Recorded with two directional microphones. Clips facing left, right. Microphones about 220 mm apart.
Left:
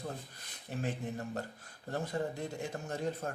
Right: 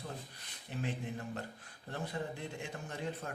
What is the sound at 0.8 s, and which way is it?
Speech, 45° left (ahead or behind).